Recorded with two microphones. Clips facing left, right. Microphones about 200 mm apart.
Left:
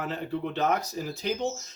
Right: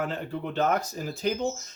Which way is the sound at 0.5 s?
50° right (ahead or behind).